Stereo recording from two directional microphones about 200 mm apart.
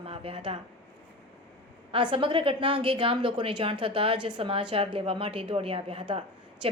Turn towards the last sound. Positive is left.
turn(degrees=-25)  # may be behind; listen again after turning